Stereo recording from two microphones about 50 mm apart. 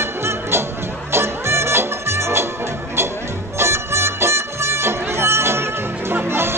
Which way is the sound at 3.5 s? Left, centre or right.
Right.